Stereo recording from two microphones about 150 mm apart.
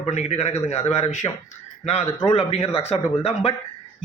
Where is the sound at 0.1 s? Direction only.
45° left (ahead or behind).